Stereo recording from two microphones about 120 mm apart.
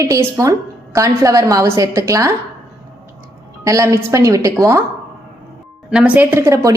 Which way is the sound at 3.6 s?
25° right (ahead or behind).